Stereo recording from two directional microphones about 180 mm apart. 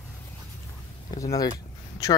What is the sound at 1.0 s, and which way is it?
Speech, 20° left (ahead or behind).